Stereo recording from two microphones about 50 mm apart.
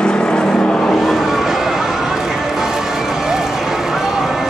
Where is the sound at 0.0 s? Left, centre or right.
Centre.